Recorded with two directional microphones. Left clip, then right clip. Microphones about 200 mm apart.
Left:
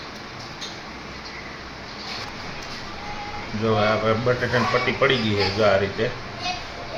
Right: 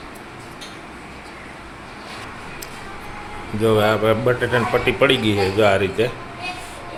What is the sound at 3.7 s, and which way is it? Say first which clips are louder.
Speech: right 4 dB; 60° right (ahead or behind).